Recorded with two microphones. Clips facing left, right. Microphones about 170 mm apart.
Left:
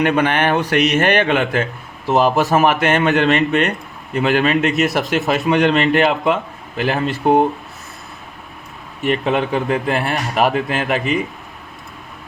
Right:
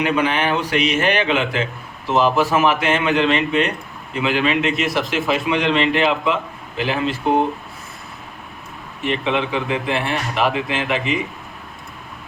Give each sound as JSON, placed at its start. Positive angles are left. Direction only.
{"t": 0.0, "sound": "a man's voice", "side_deg": 50}
{"t": 9.0, "sound": "a man's voice", "side_deg": 45}